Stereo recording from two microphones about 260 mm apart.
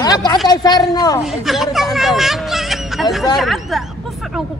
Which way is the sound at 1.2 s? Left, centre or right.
Centre.